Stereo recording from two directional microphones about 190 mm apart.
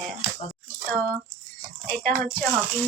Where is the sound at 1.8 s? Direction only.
45° right (ahead or behind).